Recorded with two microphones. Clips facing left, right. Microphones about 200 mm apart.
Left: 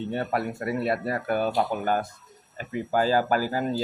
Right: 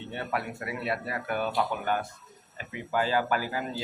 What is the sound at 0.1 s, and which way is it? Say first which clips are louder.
Speech: left 3 dB; 40° left (ahead or behind).